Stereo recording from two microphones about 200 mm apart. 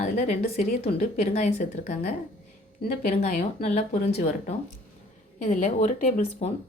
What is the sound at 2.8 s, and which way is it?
Speech, 50° left (ahead or behind).